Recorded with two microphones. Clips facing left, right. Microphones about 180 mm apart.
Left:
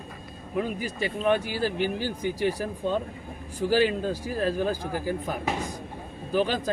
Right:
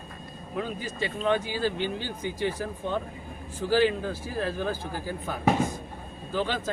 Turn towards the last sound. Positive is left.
turn(degrees=15)  # may be behind; listen again after turning